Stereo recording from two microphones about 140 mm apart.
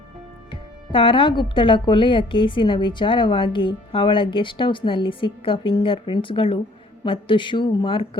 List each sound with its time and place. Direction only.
0.5 s speech: 35° left (ahead or behind)